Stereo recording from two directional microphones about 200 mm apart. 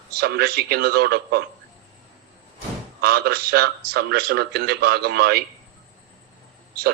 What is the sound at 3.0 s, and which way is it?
A man's voice, 50° right (ahead or behind).